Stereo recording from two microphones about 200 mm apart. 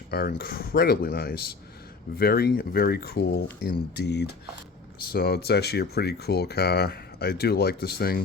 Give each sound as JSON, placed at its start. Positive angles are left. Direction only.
{"t": 0.1, "sound": "speech", "side_deg": 50}